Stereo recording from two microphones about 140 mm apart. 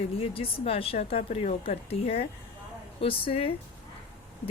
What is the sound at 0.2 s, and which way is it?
Speech, 45° left (ahead or behind).